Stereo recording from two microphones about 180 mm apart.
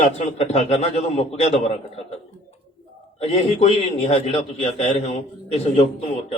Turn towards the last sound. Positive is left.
turn(degrees=30)  # may be behind; listen again after turning